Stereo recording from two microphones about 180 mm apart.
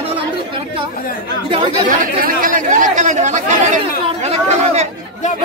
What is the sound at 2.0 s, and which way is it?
Speech, 50° right (ahead or behind).